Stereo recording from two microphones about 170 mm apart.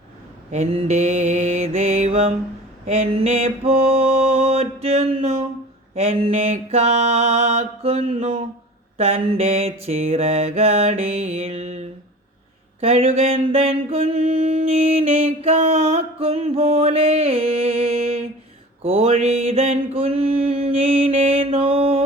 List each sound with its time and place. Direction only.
0.5 s mantra: 35° right (ahead or behind)